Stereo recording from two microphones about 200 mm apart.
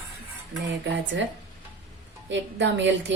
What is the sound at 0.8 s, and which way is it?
Speech, 65° right (ahead or behind).